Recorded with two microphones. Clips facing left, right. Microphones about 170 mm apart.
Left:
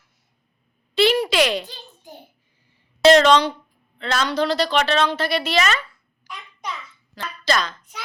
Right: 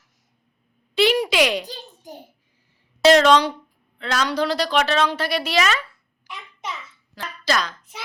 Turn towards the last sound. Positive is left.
turn(degrees=-10)  # may be behind; listen again after turning